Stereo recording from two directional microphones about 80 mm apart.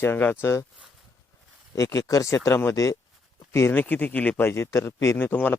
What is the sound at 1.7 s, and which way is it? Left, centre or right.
Speech, left.